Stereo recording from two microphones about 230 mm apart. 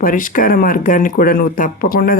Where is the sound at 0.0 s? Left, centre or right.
Left.